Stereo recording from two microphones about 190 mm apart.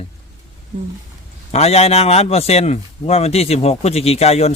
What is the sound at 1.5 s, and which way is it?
Speech, 35° left (ahead or behind).